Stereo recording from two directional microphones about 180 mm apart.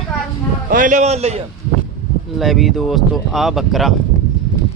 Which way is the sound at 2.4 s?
Centre (ahead or behind).